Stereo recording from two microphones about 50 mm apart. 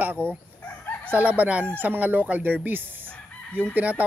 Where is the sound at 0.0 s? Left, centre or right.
Right.